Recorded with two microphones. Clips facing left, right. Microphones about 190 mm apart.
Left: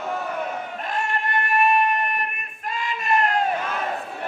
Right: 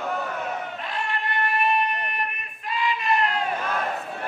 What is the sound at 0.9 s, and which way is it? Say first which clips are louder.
Music: left 4 dB; 45° left (ahead or behind).